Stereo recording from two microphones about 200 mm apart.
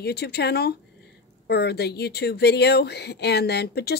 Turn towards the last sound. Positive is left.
turn(degrees=55)  # may be behind; listen again after turning